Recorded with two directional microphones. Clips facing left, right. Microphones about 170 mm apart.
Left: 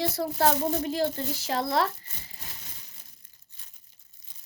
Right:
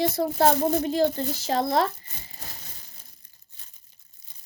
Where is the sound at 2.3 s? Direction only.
35° right (ahead or behind).